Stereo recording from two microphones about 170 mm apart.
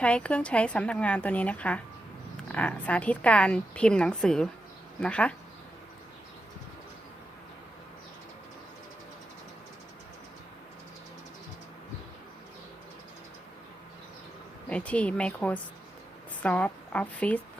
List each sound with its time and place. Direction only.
0.0 s a woman's voice: 5° left (ahead or behind)
14.7 s a woman's voice: 5° left (ahead or behind)